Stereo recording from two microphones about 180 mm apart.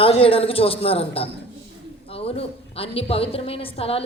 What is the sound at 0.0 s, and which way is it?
A woman's voice, 30° left (ahead or behind).